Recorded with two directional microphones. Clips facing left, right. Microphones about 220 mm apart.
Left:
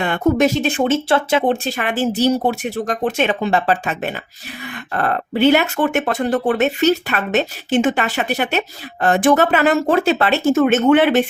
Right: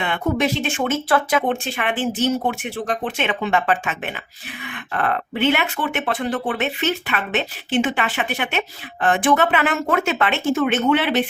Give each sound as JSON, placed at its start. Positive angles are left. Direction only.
{"t": 0.0, "sound": "speech", "side_deg": 45}